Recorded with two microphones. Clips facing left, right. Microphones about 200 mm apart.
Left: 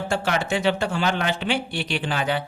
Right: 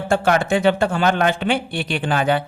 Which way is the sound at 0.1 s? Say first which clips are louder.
Right 8 dB; 50° right (ahead or behind).